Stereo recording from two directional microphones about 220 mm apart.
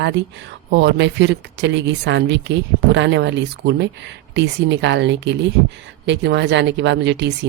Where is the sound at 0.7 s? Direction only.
55° right (ahead or behind).